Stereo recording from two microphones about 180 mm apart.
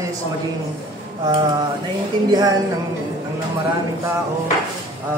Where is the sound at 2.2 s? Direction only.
20° right (ahead or behind).